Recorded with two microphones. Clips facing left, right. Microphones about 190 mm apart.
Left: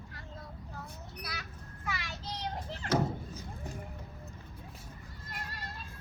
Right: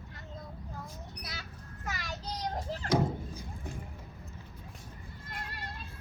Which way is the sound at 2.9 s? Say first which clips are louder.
Right 1 dB; 10° right (ahead or behind).